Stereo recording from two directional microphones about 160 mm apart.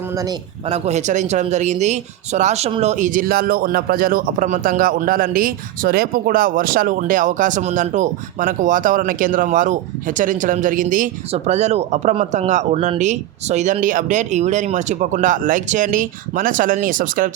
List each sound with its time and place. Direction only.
0.7 s speech: 45° right (ahead or behind)
11.3 s speech: 45° right (ahead or behind)